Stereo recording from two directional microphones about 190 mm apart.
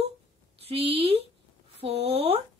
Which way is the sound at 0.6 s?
30° right (ahead or behind).